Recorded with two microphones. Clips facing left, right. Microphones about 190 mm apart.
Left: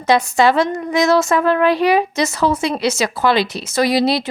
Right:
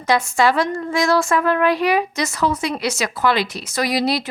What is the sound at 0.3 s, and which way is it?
Speech, 25° left (ahead or behind).